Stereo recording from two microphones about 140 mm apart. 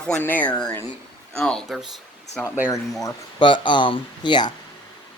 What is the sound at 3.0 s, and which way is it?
Speech, 35° left (ahead or behind).